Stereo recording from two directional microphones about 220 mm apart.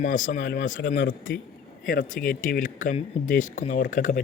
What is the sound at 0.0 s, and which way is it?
Speech, 35° left (ahead or behind).